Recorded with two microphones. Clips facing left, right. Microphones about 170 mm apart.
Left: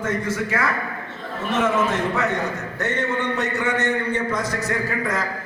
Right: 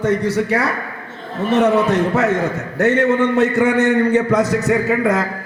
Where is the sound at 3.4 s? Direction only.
65° right (ahead or behind).